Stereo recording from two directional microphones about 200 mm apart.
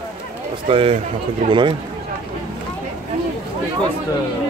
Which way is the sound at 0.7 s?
25° right (ahead or behind).